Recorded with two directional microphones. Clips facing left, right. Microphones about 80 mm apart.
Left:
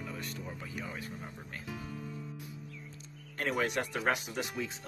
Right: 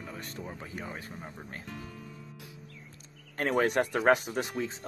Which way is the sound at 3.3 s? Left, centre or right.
Right.